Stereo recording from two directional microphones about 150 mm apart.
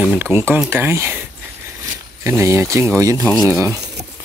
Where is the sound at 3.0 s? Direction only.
20° right (ahead or behind).